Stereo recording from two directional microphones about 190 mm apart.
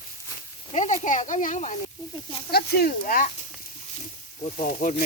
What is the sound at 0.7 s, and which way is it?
Speech, 40° left (ahead or behind).